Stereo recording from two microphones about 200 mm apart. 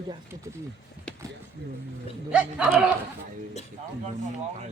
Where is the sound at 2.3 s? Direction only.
5° right (ahead or behind).